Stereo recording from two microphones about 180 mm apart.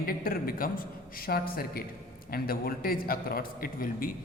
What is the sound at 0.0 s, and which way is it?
A man's voice, 55° left (ahead or behind).